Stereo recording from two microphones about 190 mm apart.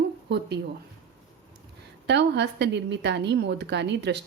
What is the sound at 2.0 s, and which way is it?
Speech, 65° right (ahead or behind).